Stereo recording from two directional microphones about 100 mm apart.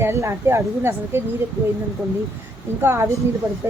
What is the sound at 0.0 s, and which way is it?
Speech, 30° right (ahead or behind).